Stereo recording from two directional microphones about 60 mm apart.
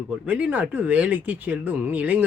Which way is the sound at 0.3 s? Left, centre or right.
Right.